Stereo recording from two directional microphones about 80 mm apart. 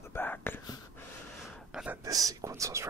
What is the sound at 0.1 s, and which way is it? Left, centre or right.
Whispering, left.